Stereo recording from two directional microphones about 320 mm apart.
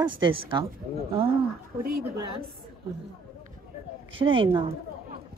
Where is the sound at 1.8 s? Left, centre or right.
Right.